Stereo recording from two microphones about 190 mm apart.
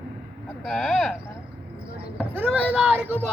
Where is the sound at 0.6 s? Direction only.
Centre (ahead or behind).